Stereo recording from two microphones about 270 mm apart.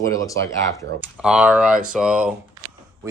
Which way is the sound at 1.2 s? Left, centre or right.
Centre.